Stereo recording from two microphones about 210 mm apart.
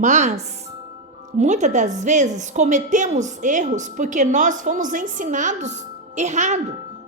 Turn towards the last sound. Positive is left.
turn(degrees=-35)  # may be behind; listen again after turning